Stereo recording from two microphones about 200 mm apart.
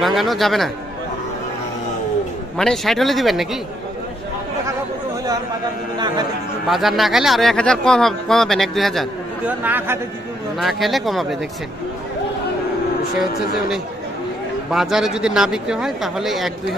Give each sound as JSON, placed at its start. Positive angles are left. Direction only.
{"t": 0.0, "sound": "speech", "side_deg": 0}
{"t": 2.5, "sound": "speech", "side_deg": 0}
{"t": 5.9, "sound": "a man's voice", "side_deg": -20}
{"t": 6.7, "sound": "speech", "side_deg": 0}
{"t": 9.6, "sound": "a man's voice", "side_deg": -10}
{"t": 14.7, "sound": "speech", "side_deg": 0}